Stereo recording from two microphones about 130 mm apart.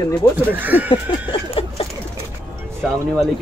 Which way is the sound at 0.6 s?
15° right (ahead or behind).